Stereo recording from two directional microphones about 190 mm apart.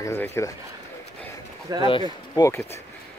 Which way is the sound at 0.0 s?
15° left (ahead or behind).